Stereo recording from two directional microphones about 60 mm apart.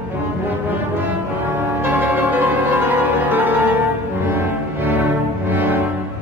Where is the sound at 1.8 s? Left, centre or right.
Right.